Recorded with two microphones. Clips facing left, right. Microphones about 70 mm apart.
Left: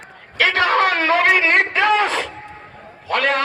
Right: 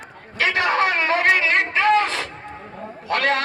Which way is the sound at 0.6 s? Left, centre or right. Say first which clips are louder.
Left 3 dB; left.